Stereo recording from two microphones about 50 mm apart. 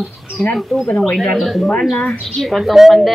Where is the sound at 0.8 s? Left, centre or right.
Left.